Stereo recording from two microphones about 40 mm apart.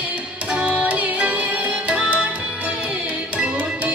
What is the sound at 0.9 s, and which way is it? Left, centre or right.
Music, right.